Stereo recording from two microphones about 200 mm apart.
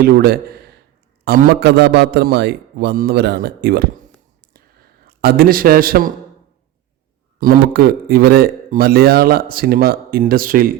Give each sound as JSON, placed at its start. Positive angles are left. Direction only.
{"t": 0.0, "sound": "a man's voice", "side_deg": -50}
{"t": 4.5, "sound": "a sound", "side_deg": -50}
{"t": 7.3, "sound": "a man's voice", "side_deg": -45}